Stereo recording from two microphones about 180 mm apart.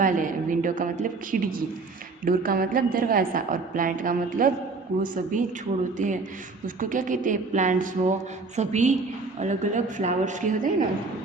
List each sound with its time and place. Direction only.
0.0 s a woman's voice: 45° right (ahead or behind)